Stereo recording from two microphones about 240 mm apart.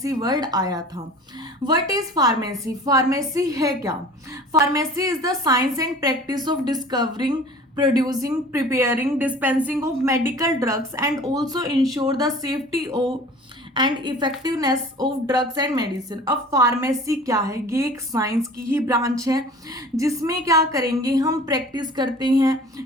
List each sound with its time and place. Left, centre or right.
0.0 s a woman's voice: centre